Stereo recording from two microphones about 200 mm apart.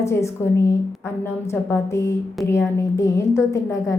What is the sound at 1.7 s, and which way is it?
A woman's voice, 15° left (ahead or behind).